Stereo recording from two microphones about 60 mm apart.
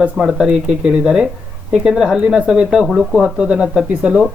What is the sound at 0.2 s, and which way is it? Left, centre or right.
Speech, centre.